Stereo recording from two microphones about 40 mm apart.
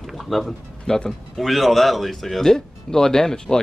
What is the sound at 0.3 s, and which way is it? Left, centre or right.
Speech, centre.